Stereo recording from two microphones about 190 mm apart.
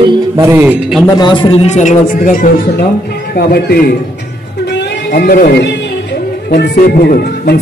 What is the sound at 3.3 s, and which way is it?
Speech, 55° left (ahead or behind).